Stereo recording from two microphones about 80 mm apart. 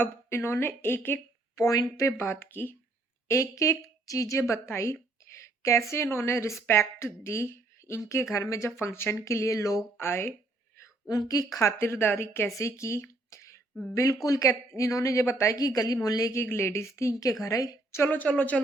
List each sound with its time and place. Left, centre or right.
0.0 s speech: left
1.5 s speech: left
2.0 s speech: left
3.2 s a woman's voice: left
10.0 s a woman's voice: left
11.5 s a woman's voice: left
15.5 s speech: left
16.3 s a woman's voice: left
17.9 s speech: left